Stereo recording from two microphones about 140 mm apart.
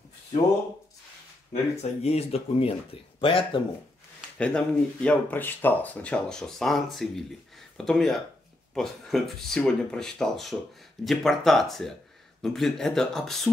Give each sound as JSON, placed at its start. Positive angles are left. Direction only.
{"t": 1.5, "sound": "speech", "side_deg": 50}
{"t": 4.4, "sound": "speech", "side_deg": 10}